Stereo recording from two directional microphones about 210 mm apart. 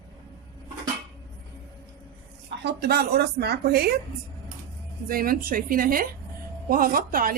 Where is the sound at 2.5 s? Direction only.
55° right (ahead or behind).